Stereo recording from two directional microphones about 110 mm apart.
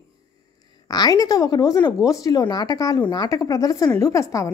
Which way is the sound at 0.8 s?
35° left (ahead or behind).